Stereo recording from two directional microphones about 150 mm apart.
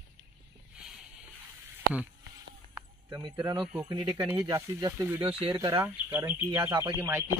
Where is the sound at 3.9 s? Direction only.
30° right (ahead or behind).